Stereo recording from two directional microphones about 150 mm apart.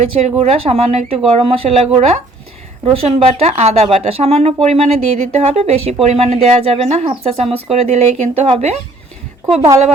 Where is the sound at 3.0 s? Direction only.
45° right (ahead or behind).